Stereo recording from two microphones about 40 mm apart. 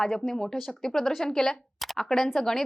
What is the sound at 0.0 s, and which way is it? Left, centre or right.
A woman's voice, centre.